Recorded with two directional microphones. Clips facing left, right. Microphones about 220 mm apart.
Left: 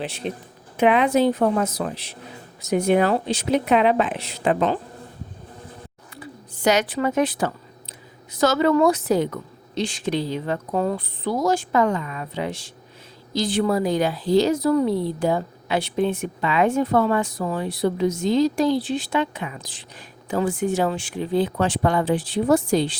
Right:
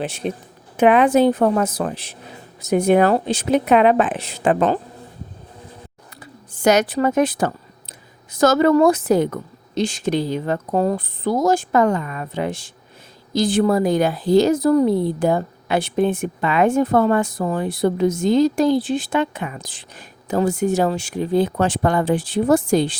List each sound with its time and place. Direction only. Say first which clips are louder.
0.0 s a woman's voice: right 4 dB; 45° right (ahead or behind)
6.1 s a woman's voice: left 6 dB; 45° right (ahead or behind)